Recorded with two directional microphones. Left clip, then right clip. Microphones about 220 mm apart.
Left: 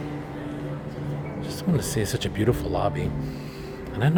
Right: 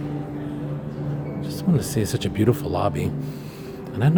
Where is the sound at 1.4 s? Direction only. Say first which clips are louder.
Right 2 dB; 5° right (ahead or behind).